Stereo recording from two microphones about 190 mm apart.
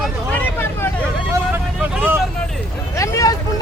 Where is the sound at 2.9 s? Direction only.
15° left (ahead or behind).